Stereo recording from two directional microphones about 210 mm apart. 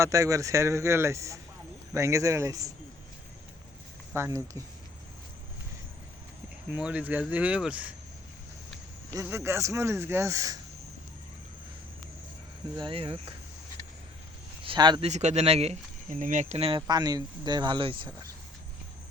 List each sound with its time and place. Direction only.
0.0 s speech: 15° right (ahead or behind)
4.1 s speech: 15° right (ahead or behind)
6.7 s speech: 5° right (ahead or behind)
9.1 s speech: 10° right (ahead or behind)
12.7 s speech: 25° right (ahead or behind)
14.6 s speech: 20° right (ahead or behind)
15.1 s speech: 35° right (ahead or behind)